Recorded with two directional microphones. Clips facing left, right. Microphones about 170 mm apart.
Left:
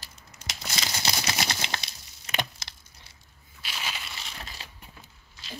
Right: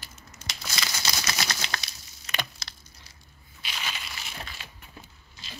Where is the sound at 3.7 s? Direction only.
5° left (ahead or behind).